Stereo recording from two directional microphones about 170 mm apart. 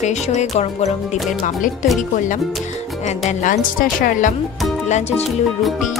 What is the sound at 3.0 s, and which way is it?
Speech, 45° left (ahead or behind).